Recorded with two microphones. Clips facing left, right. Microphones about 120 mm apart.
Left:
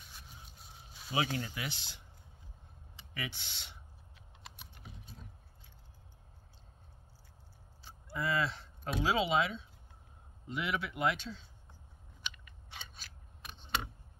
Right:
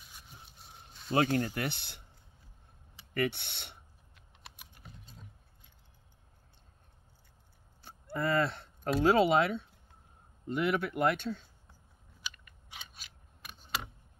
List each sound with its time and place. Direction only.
1.1 s speech: 50° right (ahead or behind)
3.2 s speech: 60° right (ahead or behind)
4.6 s typing: 5° right (ahead or behind)
7.8 s a sound: 55° right (ahead or behind)
9.0 s speech: 55° right (ahead or behind)
12.2 s scissors: 10° right (ahead or behind)